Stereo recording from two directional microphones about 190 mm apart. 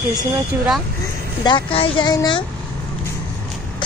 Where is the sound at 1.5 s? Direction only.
25° left (ahead or behind).